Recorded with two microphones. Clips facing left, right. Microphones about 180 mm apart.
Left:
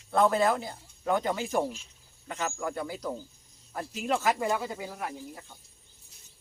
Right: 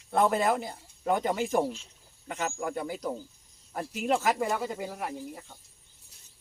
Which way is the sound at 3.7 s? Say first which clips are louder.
Right 2 dB; 10° right (ahead or behind).